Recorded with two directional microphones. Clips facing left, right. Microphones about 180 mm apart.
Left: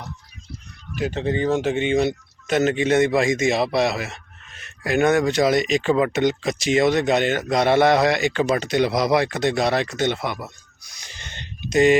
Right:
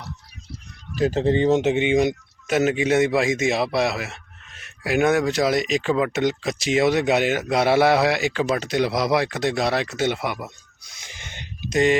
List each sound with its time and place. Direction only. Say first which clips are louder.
0.9 s speech: right 4 dB; 35° right (ahead or behind); by 10.5 s 10° right (ahead or behind)
11.0 s a sound: even; 15° right (ahead or behind)
11.7 s speech: left 3 dB; 5° left (ahead or behind)